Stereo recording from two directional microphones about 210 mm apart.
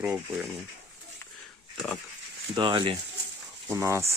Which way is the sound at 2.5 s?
20° right (ahead or behind).